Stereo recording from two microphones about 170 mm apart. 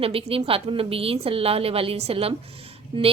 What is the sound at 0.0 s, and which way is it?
A woman's voice, 35° right (ahead or behind).